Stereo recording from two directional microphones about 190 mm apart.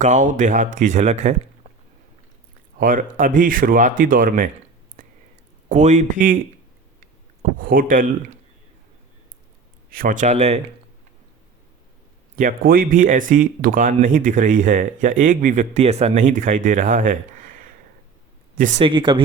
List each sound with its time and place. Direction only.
0.0 s speech: 40° right (ahead or behind)
2.7 s speech: 45° right (ahead or behind)
5.0 s a sound: 45° right (ahead or behind)
5.6 s speech: 40° right (ahead or behind)
7.6 s speech: 50° right (ahead or behind)
9.9 s speech: 45° right (ahead or behind)
12.4 s speech: 45° right (ahead or behind)
18.8 s speech: 25° right (ahead or behind)